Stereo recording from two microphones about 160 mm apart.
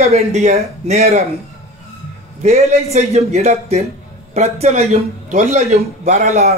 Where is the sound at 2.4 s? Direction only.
45° right (ahead or behind).